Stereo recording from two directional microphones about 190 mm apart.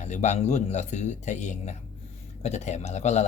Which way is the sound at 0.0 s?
35° left (ahead or behind).